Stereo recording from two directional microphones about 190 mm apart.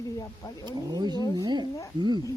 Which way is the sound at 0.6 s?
20° right (ahead or behind).